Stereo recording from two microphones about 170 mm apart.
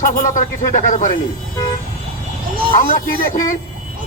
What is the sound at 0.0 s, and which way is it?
A man's voice, 50° left (ahead or behind).